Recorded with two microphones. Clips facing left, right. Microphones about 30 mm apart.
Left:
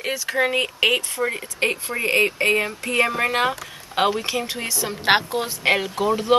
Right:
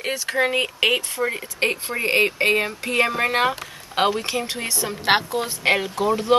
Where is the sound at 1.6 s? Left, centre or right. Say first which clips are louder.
Even; right.